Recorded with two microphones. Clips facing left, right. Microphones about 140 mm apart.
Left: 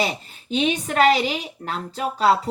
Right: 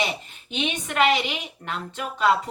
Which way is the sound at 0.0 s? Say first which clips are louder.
Left 3 dB; 35° left (ahead or behind).